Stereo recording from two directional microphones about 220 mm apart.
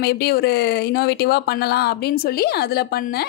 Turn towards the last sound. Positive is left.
turn(degrees=45)  # may be behind; listen again after turning